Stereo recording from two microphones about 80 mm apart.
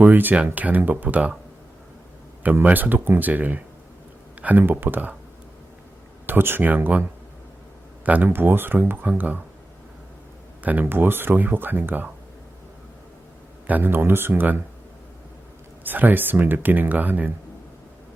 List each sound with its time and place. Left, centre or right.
0.0 s speech: right
2.4 s speech: right
6.2 s speech: right
8.0 s speech: right
10.6 s speech: right
13.7 s speech: right
15.8 s speech: right